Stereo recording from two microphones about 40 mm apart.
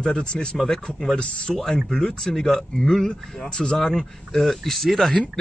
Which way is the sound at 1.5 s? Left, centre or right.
Centre.